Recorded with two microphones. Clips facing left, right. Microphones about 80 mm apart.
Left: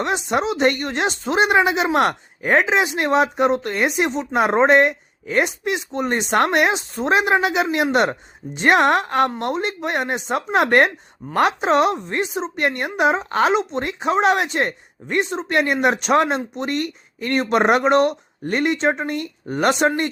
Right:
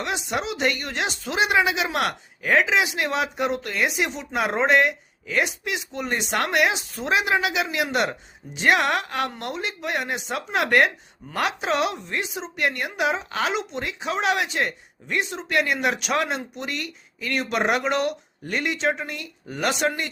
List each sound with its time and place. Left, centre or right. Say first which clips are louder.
0.0 s a woman's voice: left 6 dB; left